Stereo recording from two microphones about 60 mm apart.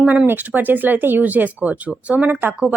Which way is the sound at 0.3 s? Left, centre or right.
Right.